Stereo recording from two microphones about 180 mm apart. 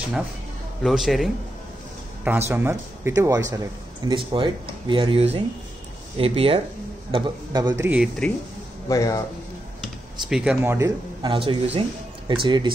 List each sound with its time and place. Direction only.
0.8 s a man's voice: centre (ahead or behind)
2.2 s speech: 15° right (ahead or behind)
8.2 s a man's voice: 5° left (ahead or behind)
8.8 s speech: 20° left (ahead or behind)
9.8 s speech: centre (ahead or behind)
11.2 s speech: 30° right (ahead or behind)